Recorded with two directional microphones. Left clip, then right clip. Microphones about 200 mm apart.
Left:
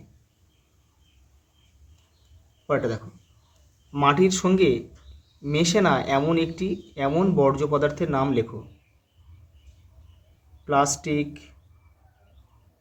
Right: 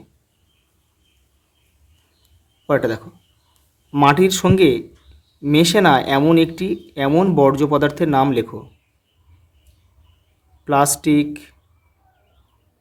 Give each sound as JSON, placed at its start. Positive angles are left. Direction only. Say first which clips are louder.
{"t": 2.6, "sound": "speech", "louder": "right 7 dB", "side_deg": -50}
{"t": 10.7, "sound": "speech", "louder": "right 6 dB", "side_deg": -50}